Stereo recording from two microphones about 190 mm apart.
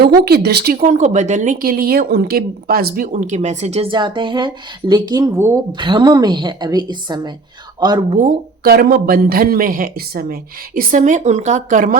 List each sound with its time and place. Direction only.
0.3 s a woman's voice: 60° right (ahead or behind); by 8.0 s 25° right (ahead or behind)
8.1 s speech: 45° right (ahead or behind)